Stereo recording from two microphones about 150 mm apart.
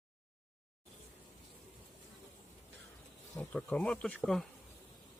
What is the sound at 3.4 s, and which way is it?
Speech, 10° left (ahead or behind).